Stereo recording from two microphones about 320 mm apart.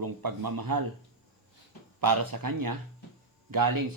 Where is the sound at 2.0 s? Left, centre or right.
Right.